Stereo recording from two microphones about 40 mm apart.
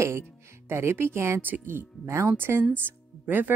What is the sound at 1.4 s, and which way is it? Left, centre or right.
Speech, right.